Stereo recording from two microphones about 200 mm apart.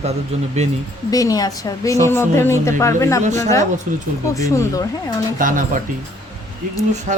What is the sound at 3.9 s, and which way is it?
Speech, 40° right (ahead or behind).